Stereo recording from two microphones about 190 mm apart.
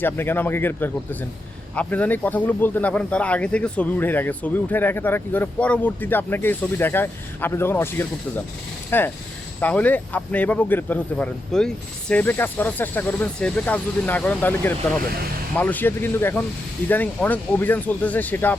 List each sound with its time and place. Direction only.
0.0 s speech: 10° left (ahead or behind)